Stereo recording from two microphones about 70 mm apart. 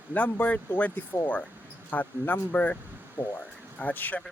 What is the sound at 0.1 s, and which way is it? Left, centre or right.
Speech, left.